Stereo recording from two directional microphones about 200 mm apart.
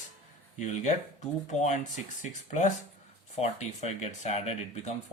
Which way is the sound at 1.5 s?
35° left (ahead or behind).